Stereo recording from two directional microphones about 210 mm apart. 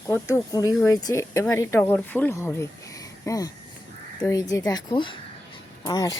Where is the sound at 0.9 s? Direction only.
15° left (ahead or behind).